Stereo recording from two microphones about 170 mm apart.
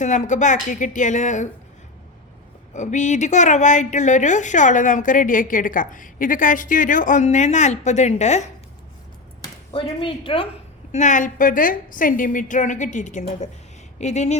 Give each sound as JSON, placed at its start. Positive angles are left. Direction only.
{"t": 0.0, "sound": "a woman's voice", "side_deg": 45}
{"t": 2.7, "sound": "a woman's voice", "side_deg": 45}
{"t": 9.4, "sound": "speech", "side_deg": 30}
{"t": 10.9, "sound": "a woman's voice", "side_deg": 45}